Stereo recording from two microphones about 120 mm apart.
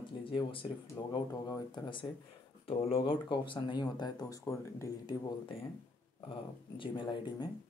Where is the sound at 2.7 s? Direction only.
50° left (ahead or behind); by 5.1 s 25° left (ahead or behind).